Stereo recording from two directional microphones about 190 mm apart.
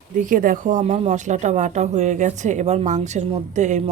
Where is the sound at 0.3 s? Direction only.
45° right (ahead or behind).